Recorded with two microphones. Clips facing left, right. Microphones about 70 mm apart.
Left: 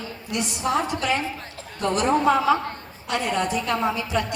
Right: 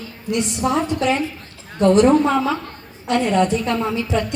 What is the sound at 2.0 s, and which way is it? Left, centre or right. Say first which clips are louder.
Speech: right 2 dB; centre.